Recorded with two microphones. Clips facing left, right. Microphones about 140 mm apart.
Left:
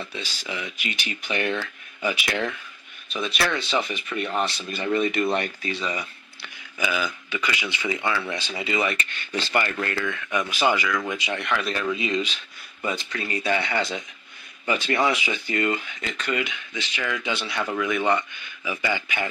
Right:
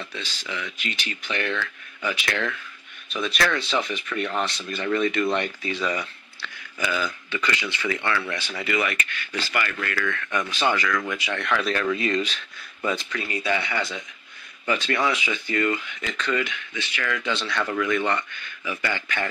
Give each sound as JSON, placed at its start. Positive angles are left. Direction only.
{"t": 0.1, "sound": "speech", "side_deg": 10}
{"t": 1.4, "sound": "speech", "side_deg": 20}
{"t": 3.1, "sound": "speech", "side_deg": 0}
{"t": 5.2, "sound": "speech", "side_deg": 35}
{"t": 5.9, "sound": "speech", "side_deg": 15}
{"t": 10.0, "sound": "speech", "side_deg": 10}
{"t": 11.3, "sound": "speech", "side_deg": 0}
{"t": 13.1, "sound": "speech", "side_deg": 35}
{"t": 13.7, "sound": "speech", "side_deg": 25}
{"t": 15.5, "sound": "speech", "side_deg": 25}
{"t": 16.2, "sound": "speech", "side_deg": 15}